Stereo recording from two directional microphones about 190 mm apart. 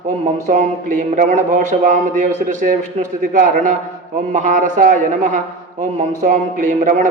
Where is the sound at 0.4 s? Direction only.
40° right (ahead or behind).